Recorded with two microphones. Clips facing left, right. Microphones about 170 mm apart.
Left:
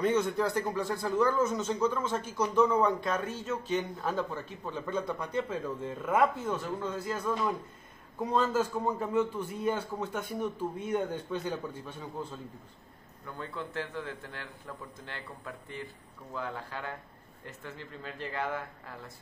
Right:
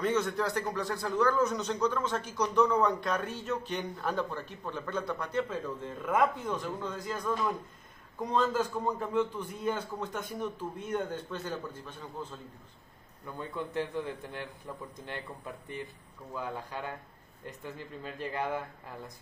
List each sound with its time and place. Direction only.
0.0 s a man's voice: 10° left (ahead or behind)
13.4 s a man's voice: 15° right (ahead or behind)